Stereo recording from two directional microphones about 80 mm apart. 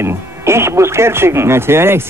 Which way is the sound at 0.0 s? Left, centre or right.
Right.